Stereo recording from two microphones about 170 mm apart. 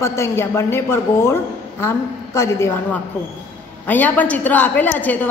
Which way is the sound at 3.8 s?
10° left (ahead or behind).